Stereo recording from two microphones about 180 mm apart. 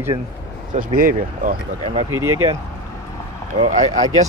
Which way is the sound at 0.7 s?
50° right (ahead or behind).